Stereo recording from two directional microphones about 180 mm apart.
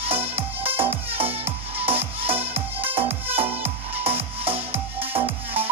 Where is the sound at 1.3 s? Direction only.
35° right (ahead or behind).